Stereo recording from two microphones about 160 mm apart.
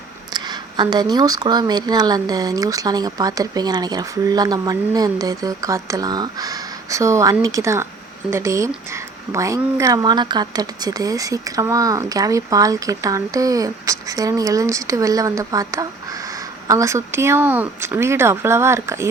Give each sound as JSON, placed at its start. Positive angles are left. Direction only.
{"t": 0.3, "sound": "speech", "side_deg": -25}